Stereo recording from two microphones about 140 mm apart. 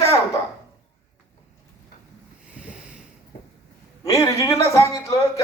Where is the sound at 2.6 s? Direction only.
10° right (ahead or behind).